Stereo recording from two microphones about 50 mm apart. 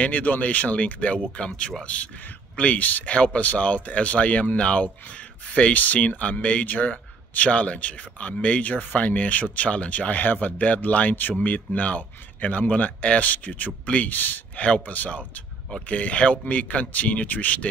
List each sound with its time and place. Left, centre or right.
0.0 s speech: left